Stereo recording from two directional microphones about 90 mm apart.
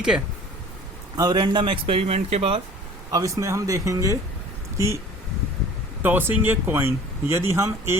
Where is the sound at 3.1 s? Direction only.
35° right (ahead or behind).